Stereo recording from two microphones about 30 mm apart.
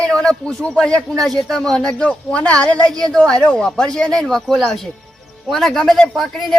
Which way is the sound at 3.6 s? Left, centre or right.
Left.